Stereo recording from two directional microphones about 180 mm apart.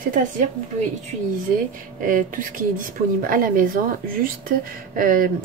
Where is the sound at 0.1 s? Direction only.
45° right (ahead or behind).